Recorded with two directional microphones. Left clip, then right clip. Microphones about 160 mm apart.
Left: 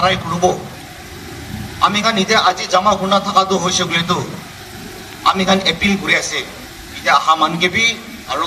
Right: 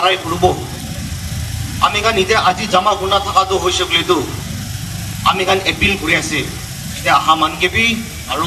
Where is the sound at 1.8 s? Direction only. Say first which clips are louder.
Right 1 dB; 20° right (ahead or behind).